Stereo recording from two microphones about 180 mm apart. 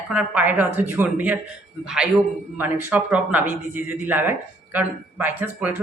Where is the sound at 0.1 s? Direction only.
10° right (ahead or behind).